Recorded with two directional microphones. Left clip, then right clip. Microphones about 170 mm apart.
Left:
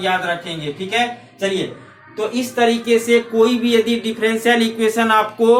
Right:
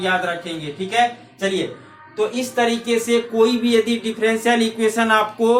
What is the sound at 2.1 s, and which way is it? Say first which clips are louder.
Speech: even; 30° right (ahead or behind).